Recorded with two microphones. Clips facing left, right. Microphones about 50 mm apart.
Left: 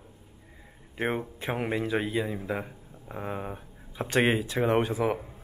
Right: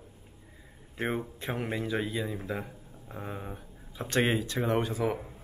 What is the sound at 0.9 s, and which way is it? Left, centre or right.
Speech, centre.